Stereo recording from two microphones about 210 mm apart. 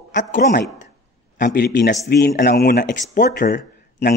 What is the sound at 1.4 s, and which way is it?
Speech, 50° left (ahead or behind).